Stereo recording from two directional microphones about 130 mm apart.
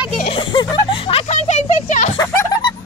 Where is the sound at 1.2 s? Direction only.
65° left (ahead or behind).